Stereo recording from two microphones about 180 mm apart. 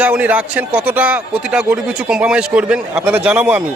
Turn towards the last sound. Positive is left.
turn(degrees=-5)  # may be behind; listen again after turning